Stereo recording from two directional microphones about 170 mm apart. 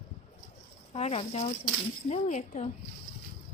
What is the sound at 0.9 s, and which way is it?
A woman's voice, 40° left (ahead or behind).